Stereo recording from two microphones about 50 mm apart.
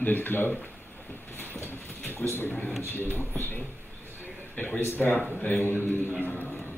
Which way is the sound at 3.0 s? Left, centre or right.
Left.